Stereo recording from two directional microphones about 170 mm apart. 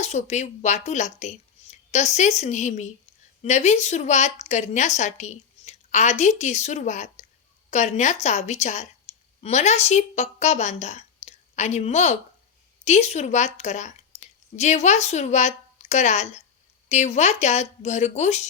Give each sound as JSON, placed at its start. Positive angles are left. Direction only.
{"t": 0.0, "sound": "a woman's voice", "side_deg": 40}